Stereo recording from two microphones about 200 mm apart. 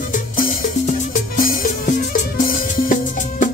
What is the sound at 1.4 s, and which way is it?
Music, 45° left (ahead or behind).